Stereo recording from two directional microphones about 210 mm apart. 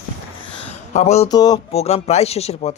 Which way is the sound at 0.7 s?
30° left (ahead or behind).